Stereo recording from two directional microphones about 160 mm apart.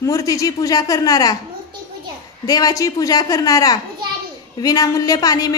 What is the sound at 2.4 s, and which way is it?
A woman's voice, 20° left (ahead or behind).